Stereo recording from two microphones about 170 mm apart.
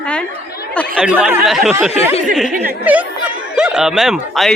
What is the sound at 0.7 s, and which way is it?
Speech, 5° left (ahead or behind).